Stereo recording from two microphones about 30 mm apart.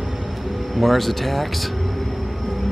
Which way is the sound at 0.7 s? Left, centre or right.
Centre.